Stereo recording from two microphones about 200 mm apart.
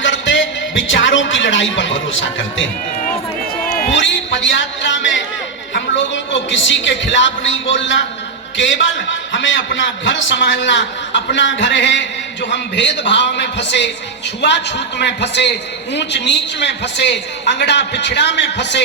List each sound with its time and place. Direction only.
0.0 s speech: 65° left (ahead or behind)
3.9 s a man's voice: 65° left (ahead or behind)